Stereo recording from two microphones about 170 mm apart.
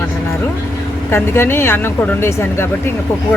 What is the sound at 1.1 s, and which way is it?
Speech, 15° left (ahead or behind).